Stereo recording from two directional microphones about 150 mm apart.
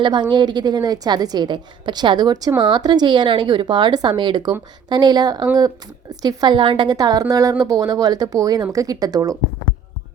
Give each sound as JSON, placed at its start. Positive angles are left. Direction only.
{"t": 0.0, "sound": "a woman's voice", "side_deg": -30}